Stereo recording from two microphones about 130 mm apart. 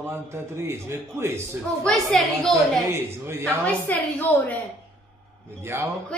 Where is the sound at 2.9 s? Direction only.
15° right (ahead or behind).